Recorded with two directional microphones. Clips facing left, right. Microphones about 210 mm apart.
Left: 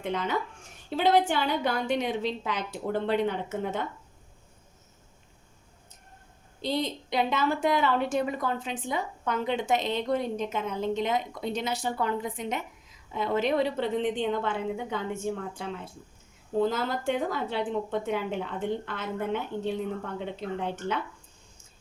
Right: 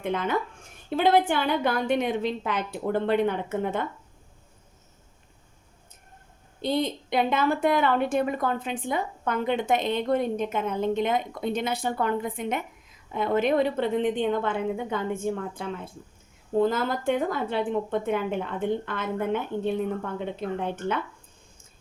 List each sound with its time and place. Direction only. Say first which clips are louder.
0.0 s a woman's voice: right 3 dB; 55° right (ahead or behind)
6.6 s a woman's voice: right 3 dB; 55° right (ahead or behind)